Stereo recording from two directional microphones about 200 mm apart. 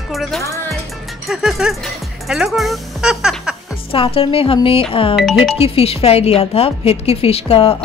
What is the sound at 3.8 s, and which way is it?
Speech, 25° left (ahead or behind).